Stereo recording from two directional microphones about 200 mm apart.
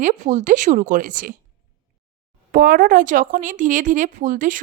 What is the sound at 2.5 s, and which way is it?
Speech, 45° right (ahead or behind).